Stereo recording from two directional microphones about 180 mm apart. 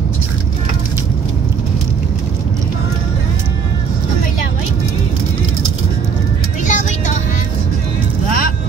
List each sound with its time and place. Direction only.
6.6 s music: 45° left (ahead or behind)